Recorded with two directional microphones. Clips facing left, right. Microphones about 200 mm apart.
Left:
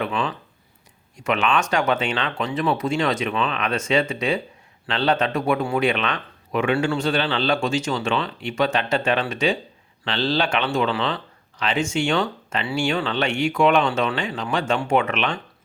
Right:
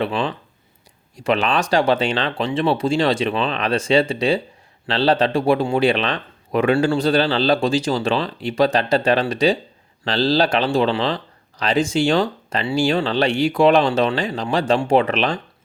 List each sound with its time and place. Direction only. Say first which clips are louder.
0.0 s speech: right 3 dB; 35° right (ahead or behind)